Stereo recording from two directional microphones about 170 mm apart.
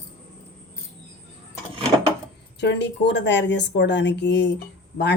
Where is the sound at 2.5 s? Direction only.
90° left.